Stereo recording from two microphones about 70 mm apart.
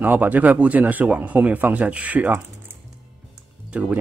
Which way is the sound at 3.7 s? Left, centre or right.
Right.